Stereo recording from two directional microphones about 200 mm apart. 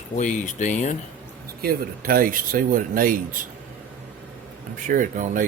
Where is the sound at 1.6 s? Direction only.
45° right (ahead or behind).